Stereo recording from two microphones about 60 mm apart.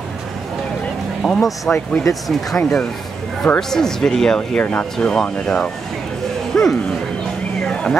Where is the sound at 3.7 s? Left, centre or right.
Centre.